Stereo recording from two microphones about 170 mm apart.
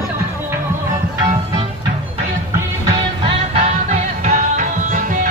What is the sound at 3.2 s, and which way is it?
Music, 40° right (ahead or behind).